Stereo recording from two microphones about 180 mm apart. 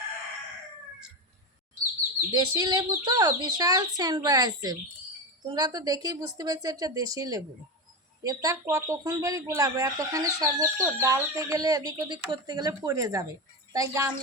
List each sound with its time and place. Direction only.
2.3 s speech: 25° right (ahead or behind)